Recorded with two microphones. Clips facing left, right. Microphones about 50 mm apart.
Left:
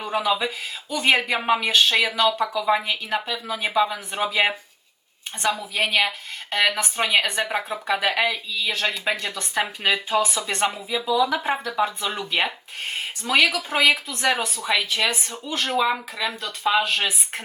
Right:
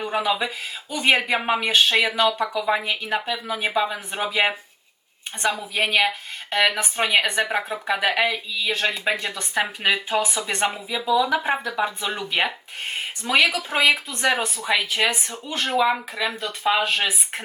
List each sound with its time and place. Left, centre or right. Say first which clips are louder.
0.0 s speech: even; centre
5.7 s speech: right 3 dB; centre
10.1 s speech: left 1 dB; centre
10.8 s speech: right 1 dB; centre
15.1 s speech: even; right
15.8 s speech: right 3 dB; centre